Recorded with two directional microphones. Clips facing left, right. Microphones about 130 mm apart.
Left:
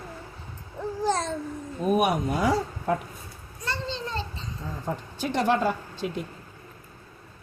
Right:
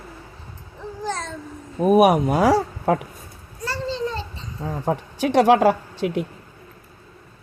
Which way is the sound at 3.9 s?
30° left (ahead or behind).